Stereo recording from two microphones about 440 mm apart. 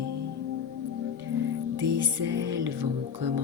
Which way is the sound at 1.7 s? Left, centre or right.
Right.